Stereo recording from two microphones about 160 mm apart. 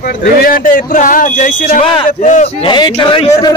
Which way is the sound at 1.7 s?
35° left (ahead or behind).